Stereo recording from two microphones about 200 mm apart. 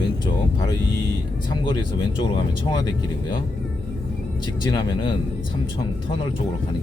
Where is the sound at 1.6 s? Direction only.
25° left (ahead or behind).